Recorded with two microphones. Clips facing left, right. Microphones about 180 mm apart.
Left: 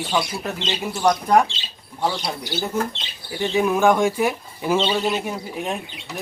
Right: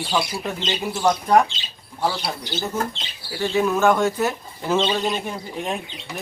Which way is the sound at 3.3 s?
15° left (ahead or behind).